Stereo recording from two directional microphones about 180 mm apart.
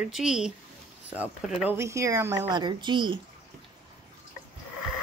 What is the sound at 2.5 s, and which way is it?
Speech, 25° right (ahead or behind).